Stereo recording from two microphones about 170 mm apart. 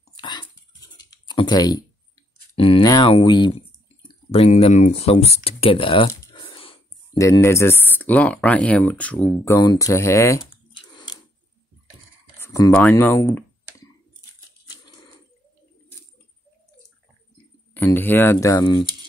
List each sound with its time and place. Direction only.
0.1 s dog: 25° left (ahead or behind)
0.9 s typing: 25° left (ahead or behind)
2.5 s speech: 30° left (ahead or behind)
6.3 s a sound: 30° left (ahead or behind)
7.2 s speech: 20° left (ahead or behind)
9.4 s speech: 20° left (ahead or behind)
12.4 s a sound: 20° left (ahead or behind)
17.7 s speech: 10° left (ahead or behind)